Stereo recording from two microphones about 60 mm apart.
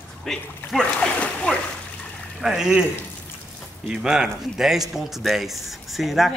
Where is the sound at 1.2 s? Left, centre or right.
Centre.